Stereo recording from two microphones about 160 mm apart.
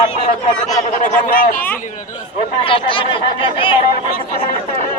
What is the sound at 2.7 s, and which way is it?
Speech, 35° left (ahead or behind).